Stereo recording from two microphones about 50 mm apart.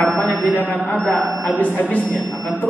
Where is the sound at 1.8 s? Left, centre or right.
Centre.